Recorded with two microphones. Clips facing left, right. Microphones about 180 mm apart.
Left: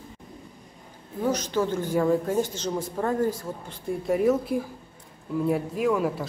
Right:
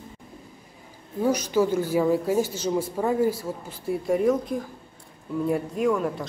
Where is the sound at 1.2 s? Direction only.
10° right (ahead or behind).